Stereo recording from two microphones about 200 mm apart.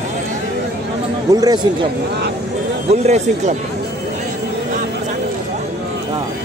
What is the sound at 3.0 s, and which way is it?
Speech, 35° right (ahead or behind).